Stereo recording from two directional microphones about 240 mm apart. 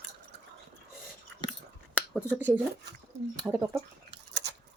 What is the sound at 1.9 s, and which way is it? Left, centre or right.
Speech, centre.